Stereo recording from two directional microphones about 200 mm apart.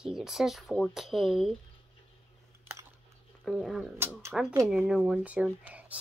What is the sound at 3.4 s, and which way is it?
Speech, centre (ahead or behind).